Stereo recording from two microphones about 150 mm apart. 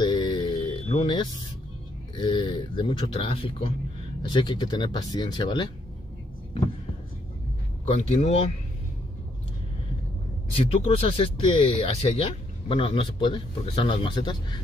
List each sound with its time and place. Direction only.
0.0 s a sound: 30° left (ahead or behind)
2.1 s speech: 35° left (ahead or behind)
7.8 s speech: 45° left (ahead or behind)
10.5 s speech: 40° left (ahead or behind)